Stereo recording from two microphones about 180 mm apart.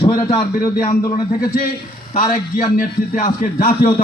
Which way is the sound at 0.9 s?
50° left (ahead or behind).